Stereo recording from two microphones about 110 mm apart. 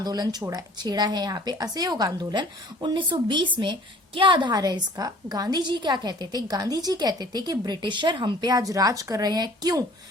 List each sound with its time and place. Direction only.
0.0 s a woman's voice: 35° right (ahead or behind)